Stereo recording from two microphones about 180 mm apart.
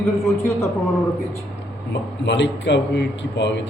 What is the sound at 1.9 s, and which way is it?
A man's voice, 85° left.